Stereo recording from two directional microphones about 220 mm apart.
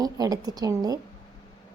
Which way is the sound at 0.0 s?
15° right (ahead or behind).